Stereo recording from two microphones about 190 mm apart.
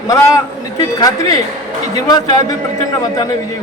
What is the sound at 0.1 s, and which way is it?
A man's voice, 15° left (ahead or behind).